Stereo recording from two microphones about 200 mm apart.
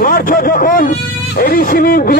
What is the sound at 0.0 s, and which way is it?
Speech, 45° left (ahead or behind).